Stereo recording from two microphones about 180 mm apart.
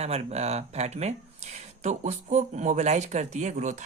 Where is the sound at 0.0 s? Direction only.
35° right (ahead or behind).